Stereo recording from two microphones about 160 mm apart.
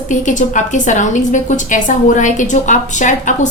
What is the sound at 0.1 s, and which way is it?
A woman's voice, 50° left (ahead or behind).